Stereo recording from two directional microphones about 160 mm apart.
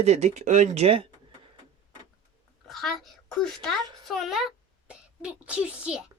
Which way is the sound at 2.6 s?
Centre (ahead or behind).